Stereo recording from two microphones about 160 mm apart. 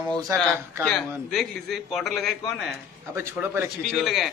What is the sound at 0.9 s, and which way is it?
A man's voice, centre (ahead or behind).